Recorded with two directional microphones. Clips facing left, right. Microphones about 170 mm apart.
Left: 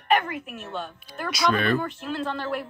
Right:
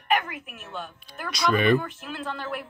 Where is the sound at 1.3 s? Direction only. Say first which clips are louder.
Right 2 dB; centre (ahead or behind).